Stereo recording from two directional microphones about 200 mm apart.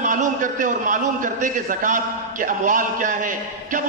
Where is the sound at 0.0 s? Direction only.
40° right (ahead or behind).